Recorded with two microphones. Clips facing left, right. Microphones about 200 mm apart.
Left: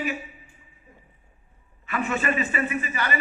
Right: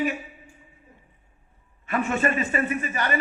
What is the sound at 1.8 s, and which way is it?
A man's voice, 45° right (ahead or behind).